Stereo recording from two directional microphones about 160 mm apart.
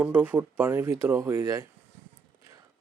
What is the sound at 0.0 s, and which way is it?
Speech, 10° right (ahead or behind).